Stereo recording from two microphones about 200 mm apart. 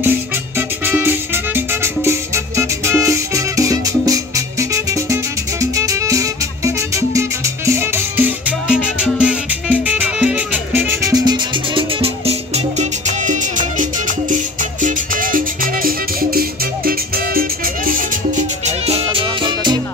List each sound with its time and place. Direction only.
0.6 s music: 10° right (ahead or behind); by 18.4 s 45° right (ahead or behind)
18.9 s music: 30° right (ahead or behind)